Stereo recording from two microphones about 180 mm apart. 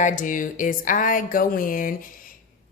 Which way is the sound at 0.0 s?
45° left (ahead or behind).